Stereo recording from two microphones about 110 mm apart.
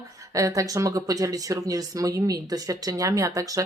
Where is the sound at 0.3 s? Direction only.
30° right (ahead or behind).